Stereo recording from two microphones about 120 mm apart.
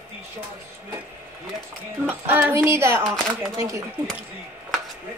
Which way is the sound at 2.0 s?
15° right (ahead or behind).